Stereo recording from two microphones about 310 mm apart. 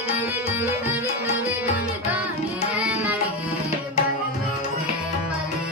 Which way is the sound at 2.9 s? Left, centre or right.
Centre.